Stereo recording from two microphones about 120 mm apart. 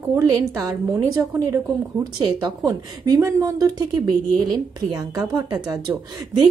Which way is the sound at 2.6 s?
25° right (ahead or behind).